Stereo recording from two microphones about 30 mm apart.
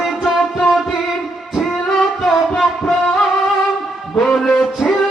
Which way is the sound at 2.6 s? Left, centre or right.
Centre.